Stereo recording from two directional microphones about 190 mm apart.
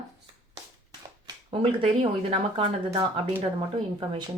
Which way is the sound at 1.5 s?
30° right (ahead or behind).